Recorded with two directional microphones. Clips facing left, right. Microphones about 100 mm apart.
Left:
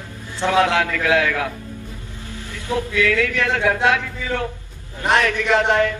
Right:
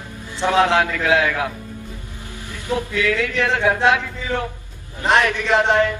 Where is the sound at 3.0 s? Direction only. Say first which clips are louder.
Left 2 dB; 25° right (ahead or behind).